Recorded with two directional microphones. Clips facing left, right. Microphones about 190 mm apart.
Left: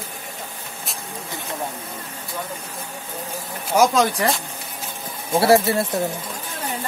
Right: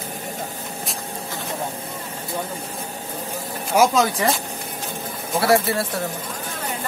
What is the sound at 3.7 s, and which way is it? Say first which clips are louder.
Speech: even; 5° right (ahead or behind).